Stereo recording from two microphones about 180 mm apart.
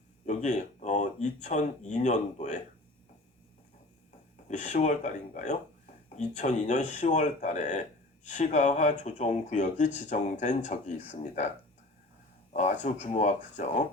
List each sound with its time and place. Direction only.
0.3 s speech: 40° left (ahead or behind)
4.4 s speech: 40° left (ahead or behind)
12.5 s speech: 40° left (ahead or behind)